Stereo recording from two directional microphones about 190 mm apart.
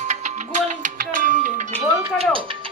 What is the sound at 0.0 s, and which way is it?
Music, 40° right (ahead or behind).